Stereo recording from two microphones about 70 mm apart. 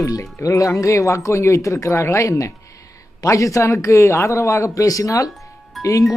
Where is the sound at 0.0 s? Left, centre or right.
Left.